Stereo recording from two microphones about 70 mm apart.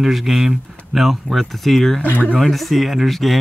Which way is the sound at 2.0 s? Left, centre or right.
Left.